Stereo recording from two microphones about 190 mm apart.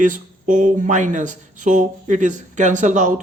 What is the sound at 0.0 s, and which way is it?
Speech, 40° right (ahead or behind).